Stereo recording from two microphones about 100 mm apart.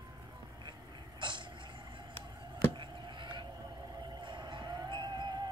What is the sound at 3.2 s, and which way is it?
Whale vocalization, 50° right (ahead or behind).